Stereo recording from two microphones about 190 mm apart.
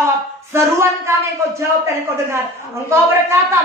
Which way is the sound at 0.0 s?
15° right (ahead or behind).